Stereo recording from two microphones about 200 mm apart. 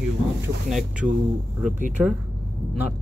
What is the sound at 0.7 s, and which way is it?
Speech, centre (ahead or behind).